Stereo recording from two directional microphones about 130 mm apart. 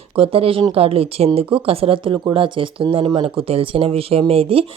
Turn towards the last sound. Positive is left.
turn(degrees=-45)  # may be behind; listen again after turning